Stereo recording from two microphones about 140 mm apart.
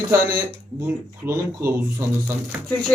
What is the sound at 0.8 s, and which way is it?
Speech, 20° right (ahead or behind).